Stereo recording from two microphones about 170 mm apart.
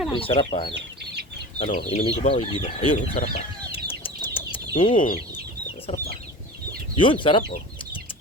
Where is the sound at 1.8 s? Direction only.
40° left (ahead or behind).